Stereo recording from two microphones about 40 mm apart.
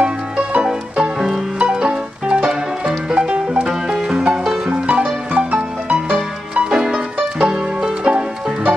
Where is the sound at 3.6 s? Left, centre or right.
Centre.